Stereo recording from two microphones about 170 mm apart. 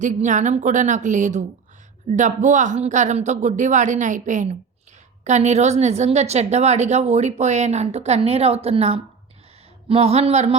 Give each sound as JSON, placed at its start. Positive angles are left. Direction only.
{"t": 0.0, "sound": "a woman's voice", "side_deg": -45}